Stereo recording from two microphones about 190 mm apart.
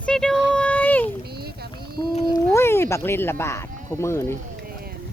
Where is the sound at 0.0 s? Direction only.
5° left (ahead or behind).